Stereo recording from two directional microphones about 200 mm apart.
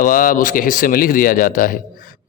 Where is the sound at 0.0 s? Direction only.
45° left (ahead or behind).